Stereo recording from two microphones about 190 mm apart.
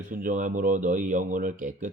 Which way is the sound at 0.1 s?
45° right (ahead or behind).